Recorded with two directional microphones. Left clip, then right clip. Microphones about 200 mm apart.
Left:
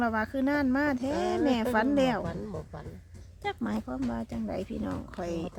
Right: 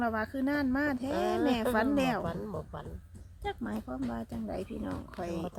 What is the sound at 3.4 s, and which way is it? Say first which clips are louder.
A woman's voice: left 4 dB; 25° left (ahead or behind).